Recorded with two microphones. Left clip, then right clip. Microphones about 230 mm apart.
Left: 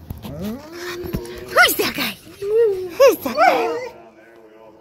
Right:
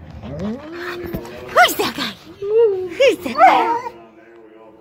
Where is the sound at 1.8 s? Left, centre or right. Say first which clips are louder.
Even; centre.